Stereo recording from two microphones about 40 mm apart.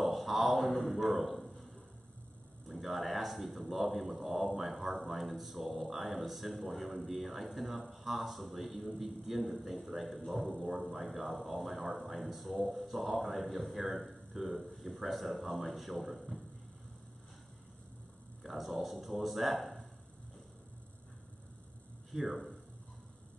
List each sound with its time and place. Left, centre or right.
0.0 s a sound: centre
2.7 s speech: centre
18.4 s speech: centre
22.1 s speech: centre